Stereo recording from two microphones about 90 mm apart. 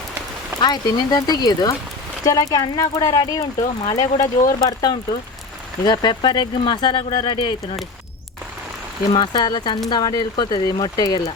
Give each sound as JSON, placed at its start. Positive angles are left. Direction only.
{"t": 0.6, "sound": "speech", "side_deg": 50}
{"t": 9.1, "sound": "speech", "side_deg": 55}